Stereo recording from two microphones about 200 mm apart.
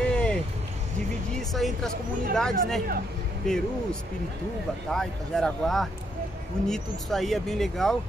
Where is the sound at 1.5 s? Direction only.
Centre (ahead or behind).